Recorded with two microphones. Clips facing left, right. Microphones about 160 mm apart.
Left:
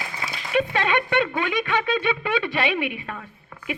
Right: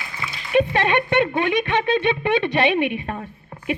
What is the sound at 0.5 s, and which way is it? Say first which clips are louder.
Speech: right 4 dB; 20° right (ahead or behind).